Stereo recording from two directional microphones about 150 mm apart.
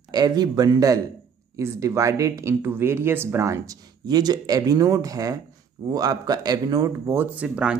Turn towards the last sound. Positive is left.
turn(degrees=-5)  # may be behind; listen again after turning